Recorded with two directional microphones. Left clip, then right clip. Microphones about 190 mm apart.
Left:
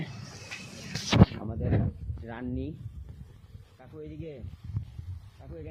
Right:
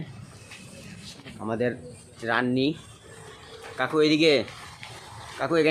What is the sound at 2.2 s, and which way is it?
Speech, 5° right (ahead or behind).